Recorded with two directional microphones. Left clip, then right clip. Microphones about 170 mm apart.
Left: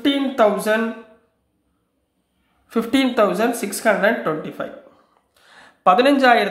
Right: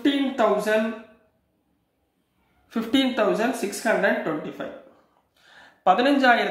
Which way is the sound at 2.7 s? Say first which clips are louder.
Left 4 dB; 40° left (ahead or behind).